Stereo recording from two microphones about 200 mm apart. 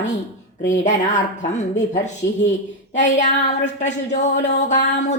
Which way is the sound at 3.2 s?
35° left (ahead or behind).